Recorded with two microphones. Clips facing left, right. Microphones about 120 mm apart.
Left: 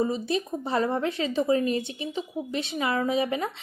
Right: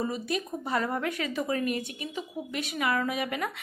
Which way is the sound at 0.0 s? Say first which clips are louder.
Left 5 dB; 25° left (ahead or behind).